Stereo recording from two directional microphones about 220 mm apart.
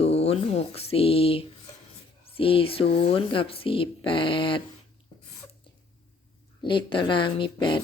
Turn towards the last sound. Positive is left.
turn(degrees=20)  # may be behind; listen again after turning